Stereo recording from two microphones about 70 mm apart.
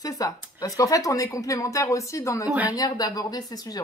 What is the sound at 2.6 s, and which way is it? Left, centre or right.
Speech, left.